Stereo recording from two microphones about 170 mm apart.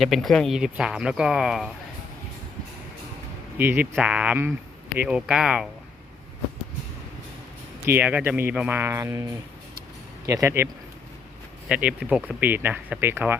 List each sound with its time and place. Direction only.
0.0 s speech: centre (ahead or behind)
3.6 s speech: 10° right (ahead or behind)
7.9 s speech: 10° right (ahead or behind)
10.2 s speech: 20° right (ahead or behind)
11.7 s speech: 5° right (ahead or behind)